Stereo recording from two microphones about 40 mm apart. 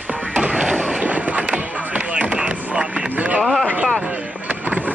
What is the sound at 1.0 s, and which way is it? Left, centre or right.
Skateboard, right.